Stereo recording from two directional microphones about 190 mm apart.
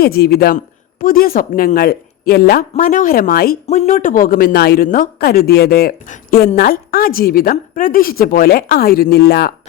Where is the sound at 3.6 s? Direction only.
35° left (ahead or behind).